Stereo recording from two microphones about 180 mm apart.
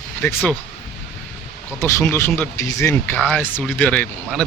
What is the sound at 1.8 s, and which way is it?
Speech, 15° left (ahead or behind).